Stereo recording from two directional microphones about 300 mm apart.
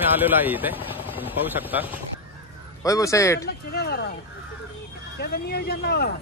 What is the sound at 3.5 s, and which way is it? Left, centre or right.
Speech, left.